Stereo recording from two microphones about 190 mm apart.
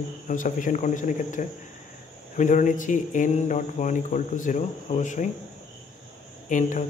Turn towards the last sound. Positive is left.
turn(degrees=40)  # may be behind; listen again after turning